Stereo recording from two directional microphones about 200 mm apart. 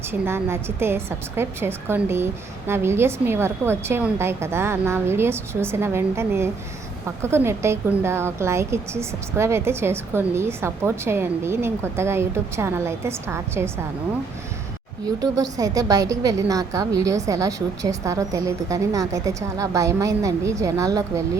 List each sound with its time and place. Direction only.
0.1 s a woman's voice: 10° right (ahead or behind)
15.2 s a woman's voice: 15° right (ahead or behind)